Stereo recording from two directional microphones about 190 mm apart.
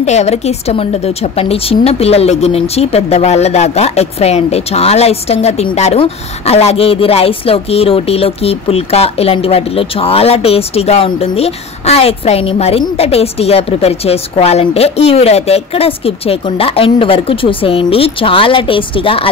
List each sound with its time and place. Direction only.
0.0 s speech: 35° left (ahead or behind)